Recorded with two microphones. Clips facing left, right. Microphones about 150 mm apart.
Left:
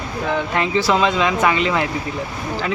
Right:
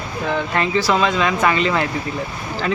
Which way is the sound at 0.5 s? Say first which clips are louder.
Even; 15° left (ahead or behind).